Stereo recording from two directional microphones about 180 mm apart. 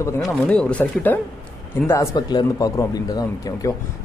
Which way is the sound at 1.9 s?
20° left (ahead or behind).